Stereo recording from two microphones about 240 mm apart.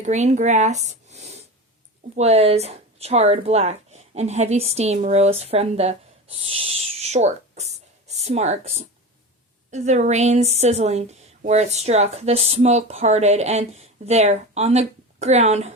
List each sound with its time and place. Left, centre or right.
0.0 s a woman's voice: right